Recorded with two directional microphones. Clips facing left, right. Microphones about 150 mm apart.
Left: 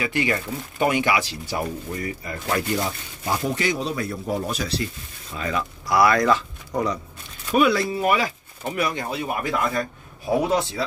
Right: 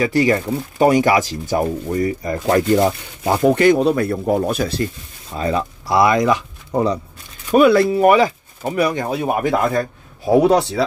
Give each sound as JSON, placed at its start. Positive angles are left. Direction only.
{"t": 0.0, "sound": "speech", "side_deg": -40}
{"t": 3.3, "sound": "a man's voice", "side_deg": -60}
{"t": 5.3, "sound": "speech", "side_deg": -35}
{"t": 6.7, "sound": "speech", "side_deg": -30}
{"t": 7.5, "sound": "speech", "side_deg": -55}
{"t": 8.6, "sound": "speech", "side_deg": -40}